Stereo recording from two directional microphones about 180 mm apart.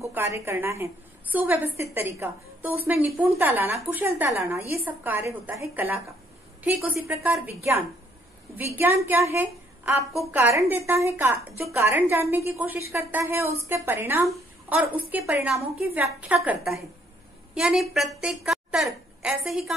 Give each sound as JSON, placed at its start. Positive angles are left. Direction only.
{"t": 0.0, "sound": "a woman's voice", "side_deg": -15}
{"t": 8.7, "sound": "a woman's voice", "side_deg": -10}